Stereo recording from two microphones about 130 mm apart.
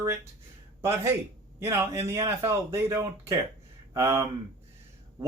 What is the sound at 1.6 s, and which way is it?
A man's voice, 20° right (ahead or behind).